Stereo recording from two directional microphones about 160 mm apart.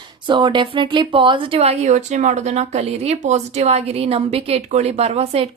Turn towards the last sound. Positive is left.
turn(degrees=-40)  # may be behind; listen again after turning